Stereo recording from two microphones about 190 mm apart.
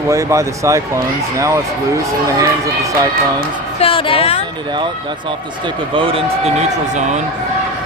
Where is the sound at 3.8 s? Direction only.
30° left (ahead or behind).